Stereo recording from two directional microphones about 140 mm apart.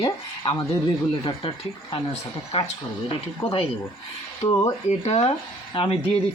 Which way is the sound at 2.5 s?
50° left (ahead or behind).